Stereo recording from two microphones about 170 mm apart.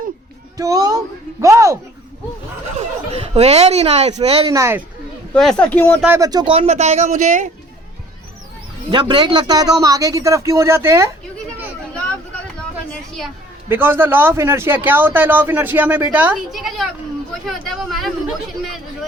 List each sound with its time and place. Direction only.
0.5 s a man's voice: 20° right (ahead or behind)
3.1 s speech: 40° right (ahead or behind)
4.5 s a man's voice: 15° right (ahead or behind)
5.3 s speech: 5° left (ahead or behind)
6.1 s speech: 20° right (ahead or behind); by 7.4 s 45° right (ahead or behind)
8.9 s a man's voice: 30° right (ahead or behind)
12.9 s a sound: centre (ahead or behind)
13.7 s a man's voice: 10° right (ahead or behind)